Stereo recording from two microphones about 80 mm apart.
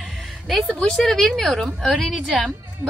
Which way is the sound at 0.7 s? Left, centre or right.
Centre.